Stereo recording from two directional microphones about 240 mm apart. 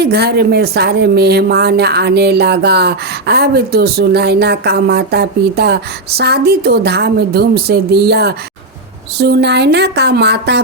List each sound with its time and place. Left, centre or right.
0.0 s a woman's voice: right